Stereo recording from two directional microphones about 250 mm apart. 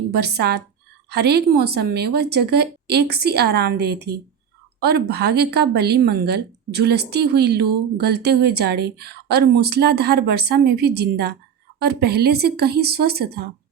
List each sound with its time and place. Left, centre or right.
0.1 s a woman's voice: right